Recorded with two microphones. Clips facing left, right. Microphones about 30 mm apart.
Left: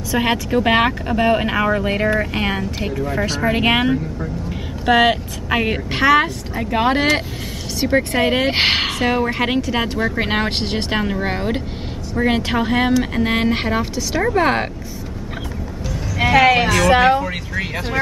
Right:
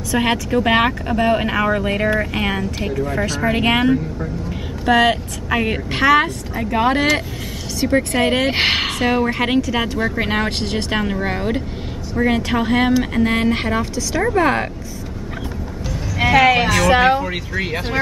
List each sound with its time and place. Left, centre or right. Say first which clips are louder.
0.1 s a woman's voice: even; centre
8.1 s speech: even; centre
9.6 s a woman's voice: right 1 dB; centre
9.9 s speech: even; centre
10.2 s a woman's voice: even; centre
11.0 s a woman's voice: even; centre
12.5 s a woman's voice: right 2 dB; centre
16.2 s speech: even; centre